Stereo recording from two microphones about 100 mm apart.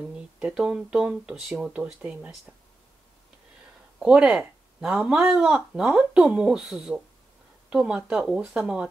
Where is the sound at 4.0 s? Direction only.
10° right (ahead or behind).